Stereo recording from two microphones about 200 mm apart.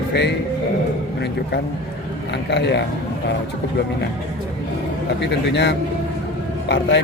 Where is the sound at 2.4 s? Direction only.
60° left (ahead or behind).